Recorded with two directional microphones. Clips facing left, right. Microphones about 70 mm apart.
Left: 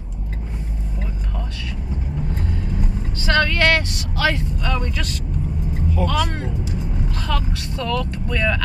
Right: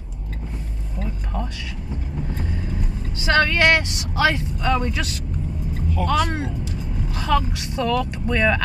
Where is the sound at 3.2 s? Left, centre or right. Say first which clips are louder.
Right 1 dB; centre.